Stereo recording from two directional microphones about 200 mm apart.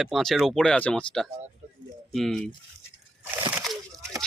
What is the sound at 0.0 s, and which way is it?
Speech, centre (ahead or behind).